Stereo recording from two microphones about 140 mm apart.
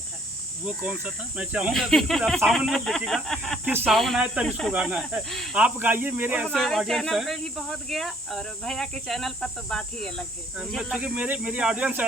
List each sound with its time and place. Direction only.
0.6 s speech: 10° right (ahead or behind)
3.6 s speech: 15° right (ahead or behind)
3.8 s speech: centre (ahead or behind)
10.8 s speech: 10° right (ahead or behind)